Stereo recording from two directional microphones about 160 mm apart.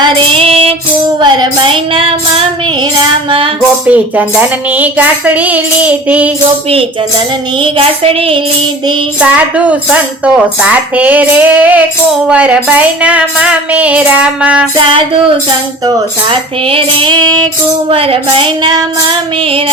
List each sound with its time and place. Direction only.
0.0 s child singing: 35° right (ahead or behind)
3.2 s music: 35° right (ahead or behind)
3.8 s speech: 10° right (ahead or behind)
7.6 s female singing: 35° right (ahead or behind)
9.2 s speech: 10° right (ahead or behind)
16.3 s female singing: 35° right (ahead or behind)